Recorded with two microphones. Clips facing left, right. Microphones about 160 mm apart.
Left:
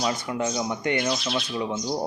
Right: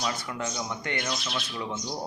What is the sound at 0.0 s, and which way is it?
Speech, 20° left (ahead or behind).